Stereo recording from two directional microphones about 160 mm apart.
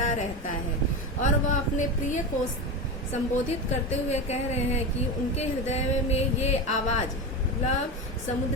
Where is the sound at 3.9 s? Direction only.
45° left (ahead or behind).